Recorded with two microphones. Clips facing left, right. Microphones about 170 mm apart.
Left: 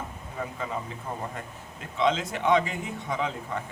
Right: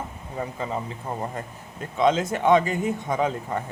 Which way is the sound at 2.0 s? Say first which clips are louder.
Right 5 dB; 45° right (ahead or behind).